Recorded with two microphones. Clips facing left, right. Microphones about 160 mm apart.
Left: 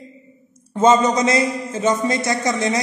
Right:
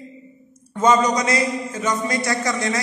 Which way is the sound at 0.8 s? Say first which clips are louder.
Left 3 dB; 25° left (ahead or behind).